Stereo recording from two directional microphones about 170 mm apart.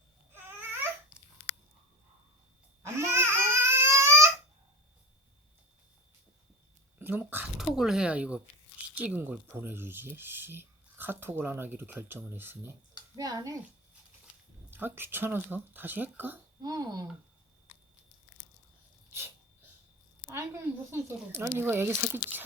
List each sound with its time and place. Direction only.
0.4 s babbling: 10° right (ahead or behind)
2.8 s crying: 15° right (ahead or behind)
7.0 s a woman's voice: 10° right (ahead or behind)
14.7 s speech: 10° right (ahead or behind)
16.6 s a woman's voice: 25° right (ahead or behind)
20.3 s speech: 15° right (ahead or behind)